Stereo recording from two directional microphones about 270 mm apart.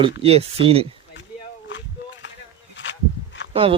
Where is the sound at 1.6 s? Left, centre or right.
Left.